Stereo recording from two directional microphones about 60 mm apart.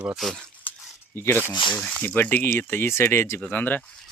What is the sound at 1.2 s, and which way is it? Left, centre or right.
Speech, left.